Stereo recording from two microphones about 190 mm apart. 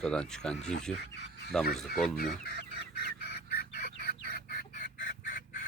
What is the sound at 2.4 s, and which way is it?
Chicken, 55° left (ahead or behind).